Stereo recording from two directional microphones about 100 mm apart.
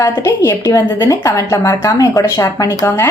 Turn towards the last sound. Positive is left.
turn(degrees=30)  # may be behind; listen again after turning